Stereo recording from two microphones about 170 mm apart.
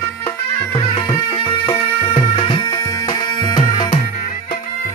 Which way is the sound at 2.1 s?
35° left (ahead or behind).